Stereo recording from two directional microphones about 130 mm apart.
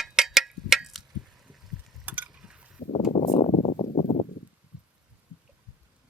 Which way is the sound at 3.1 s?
55° left (ahead or behind).